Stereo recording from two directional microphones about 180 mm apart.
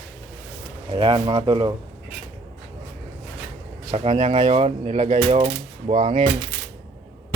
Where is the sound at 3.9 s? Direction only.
35° right (ahead or behind).